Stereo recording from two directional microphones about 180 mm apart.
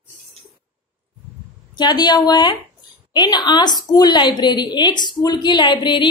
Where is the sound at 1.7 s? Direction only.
25° left (ahead or behind).